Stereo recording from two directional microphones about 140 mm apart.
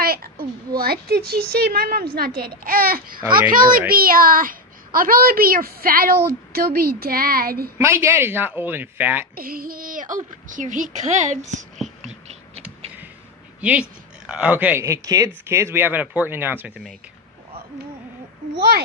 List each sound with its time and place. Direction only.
0.0 s a child's voice: 90° right
3.4 s a woman's voice: 75° right (ahead or behind)
7.8 s speech: 20° right (ahead or behind)
9.3 s speech: 90° right; by 11.6 s 60° right (ahead or behind)
12.0 s a sound: 50° right (ahead or behind)
13.6 s speech: 10° right (ahead or behind)